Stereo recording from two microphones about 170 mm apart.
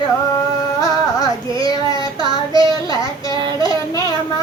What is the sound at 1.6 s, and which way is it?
Child singing, 20° left (ahead or behind).